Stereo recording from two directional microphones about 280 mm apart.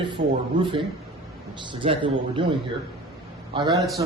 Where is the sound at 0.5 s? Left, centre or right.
Centre.